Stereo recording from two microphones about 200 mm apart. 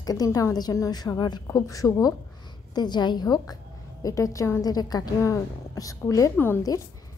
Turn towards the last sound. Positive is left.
turn(degrees=15)  # may be behind; listen again after turning